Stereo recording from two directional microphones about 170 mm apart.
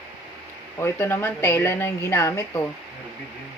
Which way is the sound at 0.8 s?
15° left (ahead or behind).